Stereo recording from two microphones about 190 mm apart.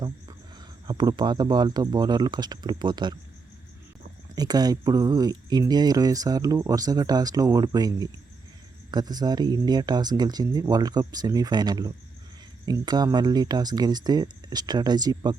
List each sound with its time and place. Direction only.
0.9 s speech: 20° right (ahead or behind)
4.4 s speech: 20° right (ahead or behind)